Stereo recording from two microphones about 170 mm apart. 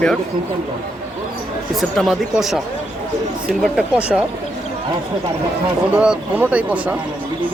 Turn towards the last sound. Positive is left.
turn(degrees=-10)  # may be behind; listen again after turning